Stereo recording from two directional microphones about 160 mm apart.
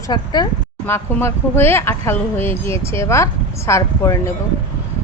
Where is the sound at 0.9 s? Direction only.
15° left (ahead or behind).